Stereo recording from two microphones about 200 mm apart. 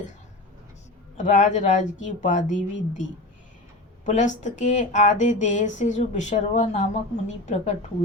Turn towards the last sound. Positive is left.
turn(degrees=35)  # may be behind; listen again after turning